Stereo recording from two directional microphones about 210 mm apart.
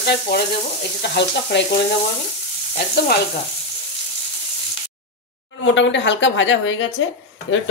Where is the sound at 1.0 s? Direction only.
55° left (ahead or behind).